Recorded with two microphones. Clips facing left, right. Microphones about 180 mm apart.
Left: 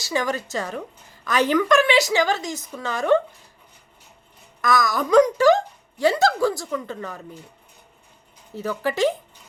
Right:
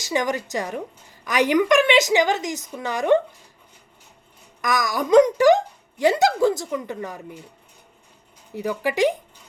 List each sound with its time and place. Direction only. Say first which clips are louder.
0.0 s a woman's voice: right 1 dB; 20° right (ahead or behind)
4.6 s a woman's voice: left 2 dB; 15° right (ahead or behind)
8.5 s a woman's voice: right 1 dB; 15° right (ahead or behind)